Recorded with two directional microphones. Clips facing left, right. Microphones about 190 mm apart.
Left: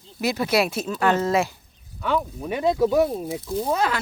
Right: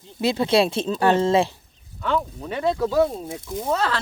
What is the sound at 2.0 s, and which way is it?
Speech, 5° left (ahead or behind).